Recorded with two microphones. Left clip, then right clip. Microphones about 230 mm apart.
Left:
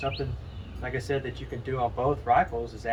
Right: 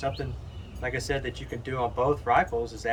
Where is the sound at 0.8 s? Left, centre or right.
Centre.